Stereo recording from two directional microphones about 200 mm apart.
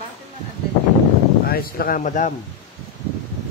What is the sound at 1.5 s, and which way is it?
Speech, 45° left (ahead or behind).